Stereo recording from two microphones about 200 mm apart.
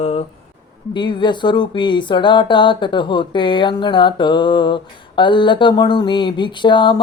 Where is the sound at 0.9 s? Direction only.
25° left (ahead or behind).